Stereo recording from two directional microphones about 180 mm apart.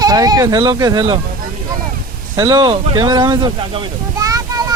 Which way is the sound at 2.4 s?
20° right (ahead or behind).